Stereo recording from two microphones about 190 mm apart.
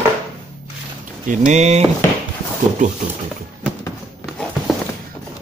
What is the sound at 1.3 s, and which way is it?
Speech, 35° right (ahead or behind).